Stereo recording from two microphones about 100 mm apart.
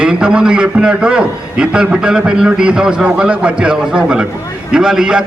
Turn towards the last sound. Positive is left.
turn(degrees=-5)  # may be behind; listen again after turning